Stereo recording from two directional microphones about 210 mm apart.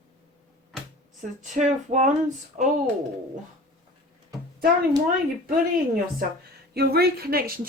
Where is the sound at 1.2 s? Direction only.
35° right (ahead or behind).